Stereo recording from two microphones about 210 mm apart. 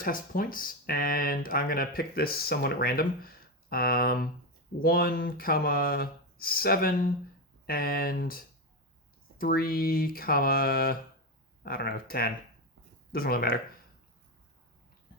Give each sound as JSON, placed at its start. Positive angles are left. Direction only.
{"t": 0.0, "sound": "speech", "side_deg": 40}
{"t": 9.4, "sound": "speech", "side_deg": 45}